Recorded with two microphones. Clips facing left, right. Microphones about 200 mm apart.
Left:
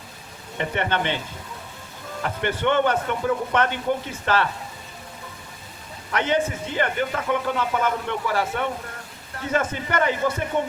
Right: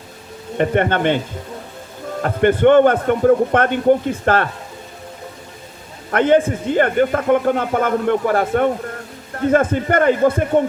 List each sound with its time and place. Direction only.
0.5 s a man's voice: 50° right (ahead or behind)
2.2 s a man's voice: 50° right (ahead or behind)
6.1 s a man's voice: 50° right (ahead or behind)